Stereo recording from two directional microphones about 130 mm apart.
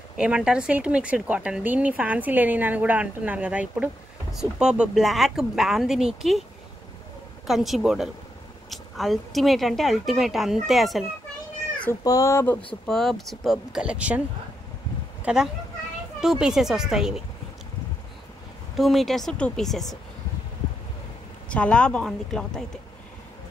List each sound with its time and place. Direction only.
0.2 s speech: 5° right (ahead or behind)
7.4 s speech: centre (ahead or behind)
12.0 s speech: 25° left (ahead or behind)
12.8 s speech: centre (ahead or behind)
15.2 s speech: 5° right (ahead or behind)
18.8 s speech: centre (ahead or behind)
21.5 s speech: 10° left (ahead or behind)